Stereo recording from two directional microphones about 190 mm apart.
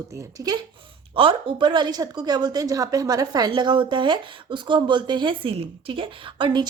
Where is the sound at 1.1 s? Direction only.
25° right (ahead or behind).